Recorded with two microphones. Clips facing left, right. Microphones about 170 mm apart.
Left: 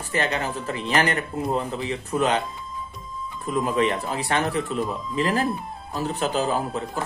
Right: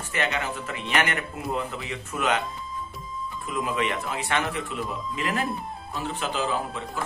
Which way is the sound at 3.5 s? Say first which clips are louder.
Left 5 dB; 40° left (ahead or behind).